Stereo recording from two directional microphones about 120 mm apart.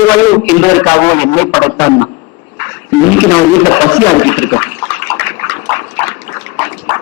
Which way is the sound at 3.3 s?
20° left (ahead or behind).